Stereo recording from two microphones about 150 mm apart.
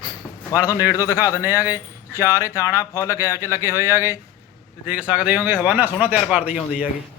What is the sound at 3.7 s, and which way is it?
Speech, 15° right (ahead or behind).